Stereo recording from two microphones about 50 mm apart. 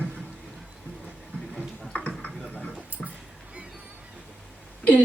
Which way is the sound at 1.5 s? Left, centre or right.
Centre.